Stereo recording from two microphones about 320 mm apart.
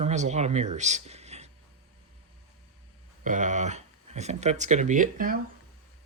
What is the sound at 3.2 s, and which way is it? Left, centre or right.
Speech, right.